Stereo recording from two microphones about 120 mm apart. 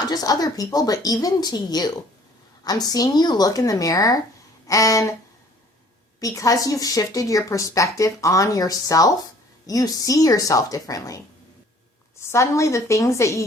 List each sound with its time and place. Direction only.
0.0 s speech: 30° left (ahead or behind)
6.1 s speech: 30° left (ahead or behind)
12.2 s speech: 25° left (ahead or behind)